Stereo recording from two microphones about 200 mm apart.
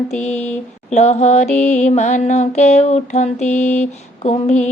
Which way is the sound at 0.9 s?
35° left (ahead or behind).